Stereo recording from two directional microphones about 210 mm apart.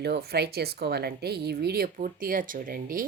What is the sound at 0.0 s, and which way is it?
A woman's voice, 50° right (ahead or behind).